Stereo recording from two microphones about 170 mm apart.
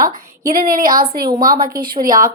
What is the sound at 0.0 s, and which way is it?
A woman's voice, 55° right (ahead or behind).